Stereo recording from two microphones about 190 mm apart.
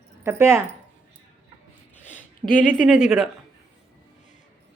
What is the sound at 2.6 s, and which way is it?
Speech, 5° right (ahead or behind).